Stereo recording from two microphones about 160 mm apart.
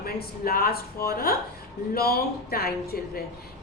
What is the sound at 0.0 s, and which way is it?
A woman's voice, 70° left (ahead or behind).